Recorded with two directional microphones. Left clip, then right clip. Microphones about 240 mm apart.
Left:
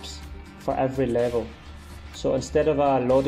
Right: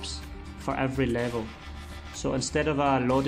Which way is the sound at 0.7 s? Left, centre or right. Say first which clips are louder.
Left 5 dB; centre.